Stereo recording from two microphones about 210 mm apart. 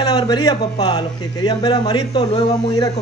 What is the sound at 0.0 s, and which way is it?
A man's voice, 20° left (ahead or behind).